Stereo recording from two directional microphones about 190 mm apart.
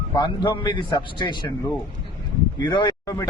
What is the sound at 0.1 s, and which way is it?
A man's voice, 25° left (ahead or behind).